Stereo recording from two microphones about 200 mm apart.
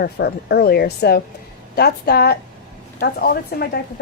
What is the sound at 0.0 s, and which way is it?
Speech, 50° left (ahead or behind).